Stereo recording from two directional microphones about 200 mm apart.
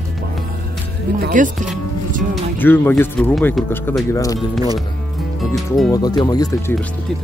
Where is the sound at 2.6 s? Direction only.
10° left (ahead or behind).